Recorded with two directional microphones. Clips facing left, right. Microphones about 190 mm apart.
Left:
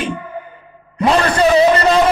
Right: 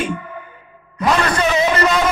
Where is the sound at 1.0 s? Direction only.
30° left (ahead or behind).